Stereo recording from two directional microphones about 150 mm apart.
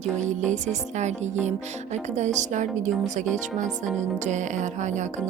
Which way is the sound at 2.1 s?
50° right (ahead or behind).